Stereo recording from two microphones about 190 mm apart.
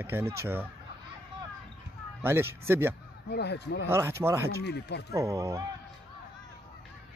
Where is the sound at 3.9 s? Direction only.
15° right (ahead or behind).